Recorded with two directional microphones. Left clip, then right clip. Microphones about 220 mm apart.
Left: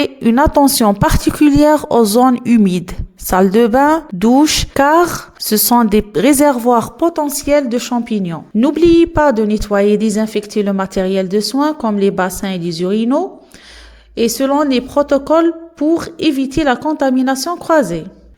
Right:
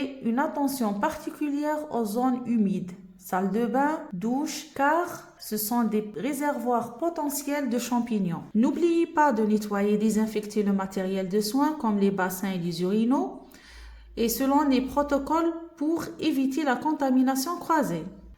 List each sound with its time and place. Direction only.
0.0 s a woman's voice: 50° left (ahead or behind)